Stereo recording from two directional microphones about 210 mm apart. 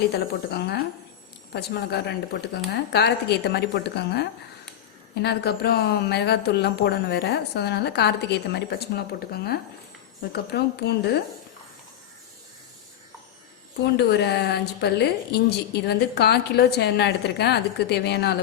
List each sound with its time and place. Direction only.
0.5 s a woman's voice: 50° left (ahead or behind)
13.9 s a woman's voice: 55° left (ahead or behind)